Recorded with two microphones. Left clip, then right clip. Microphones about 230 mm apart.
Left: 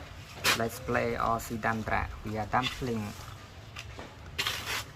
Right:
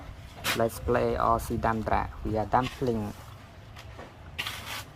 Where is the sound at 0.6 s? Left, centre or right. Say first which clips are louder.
Right 4 dB; right.